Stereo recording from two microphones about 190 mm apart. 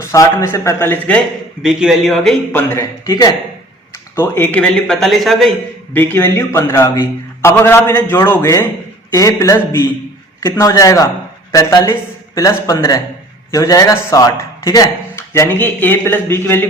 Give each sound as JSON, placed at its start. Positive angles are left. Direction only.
{"t": 0.0, "sound": "speech", "side_deg": 15}
{"t": 1.6, "sound": "speech", "side_deg": 0}
{"t": 2.5, "sound": "speech", "side_deg": 15}